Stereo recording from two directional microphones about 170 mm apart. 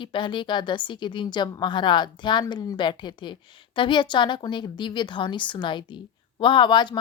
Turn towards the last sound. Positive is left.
turn(degrees=25)  # may be behind; listen again after turning